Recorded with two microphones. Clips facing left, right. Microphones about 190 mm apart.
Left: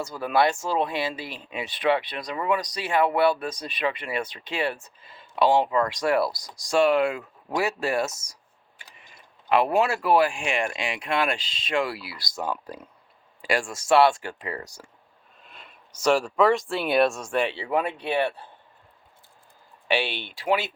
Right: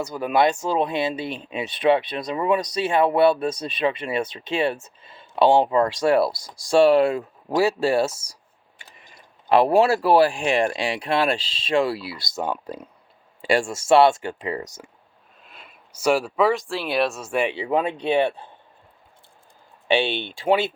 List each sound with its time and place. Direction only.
0.0 s speech: 15° right (ahead or behind)
9.5 s speech: 35° right (ahead or behind); by 14.8 s 20° right (ahead or behind)
15.4 s speech: 5° right (ahead or behind); by 18.4 s 25° right (ahead or behind)
19.9 s speech: 25° right (ahead or behind)